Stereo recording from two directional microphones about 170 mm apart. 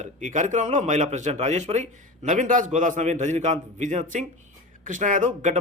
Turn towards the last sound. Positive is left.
turn(degrees=-45)  # may be behind; listen again after turning